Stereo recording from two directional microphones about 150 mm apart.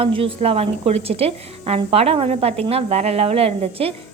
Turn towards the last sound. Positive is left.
turn(degrees=-40)  # may be behind; listen again after turning